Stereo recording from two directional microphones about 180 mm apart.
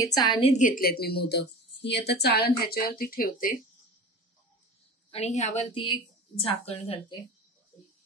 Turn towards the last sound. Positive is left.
turn(degrees=30)  # may be behind; listen again after turning